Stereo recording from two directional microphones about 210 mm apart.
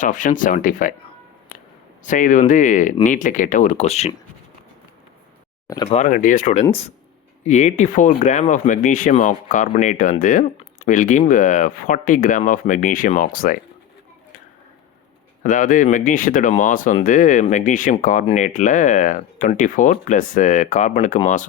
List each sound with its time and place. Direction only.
0.0 s speech: 40° left (ahead or behind)
2.0 s speech: 40° left (ahead or behind)
5.6 s speech: 15° left (ahead or behind)
5.9 s speech: 35° left (ahead or behind)
15.4 s speech: 40° left (ahead or behind)